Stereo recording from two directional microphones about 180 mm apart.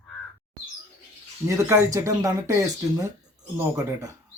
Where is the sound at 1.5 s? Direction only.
15° right (ahead or behind).